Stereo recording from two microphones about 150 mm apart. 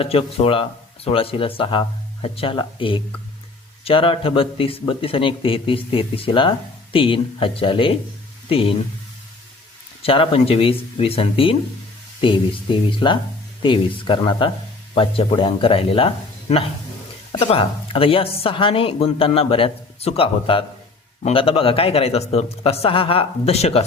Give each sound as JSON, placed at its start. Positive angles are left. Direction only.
{"t": 0.0, "sound": "speech", "side_deg": 40}
{"t": 10.0, "sound": "speech", "side_deg": 40}